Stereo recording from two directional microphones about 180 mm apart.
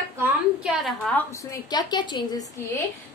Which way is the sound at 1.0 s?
15° left (ahead or behind).